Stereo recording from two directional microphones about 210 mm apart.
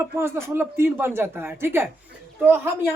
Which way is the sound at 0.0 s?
10° right (ahead or behind).